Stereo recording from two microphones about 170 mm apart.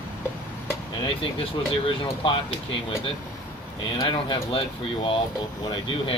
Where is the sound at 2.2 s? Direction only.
30° left (ahead or behind).